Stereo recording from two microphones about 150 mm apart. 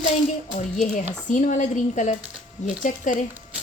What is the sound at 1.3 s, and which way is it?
Speech, 55° left (ahead or behind).